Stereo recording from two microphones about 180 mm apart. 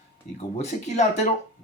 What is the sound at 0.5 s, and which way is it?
Speech, 40° left (ahead or behind).